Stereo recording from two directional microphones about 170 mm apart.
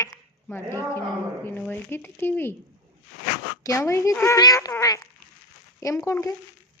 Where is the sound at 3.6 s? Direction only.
20° left (ahead or behind).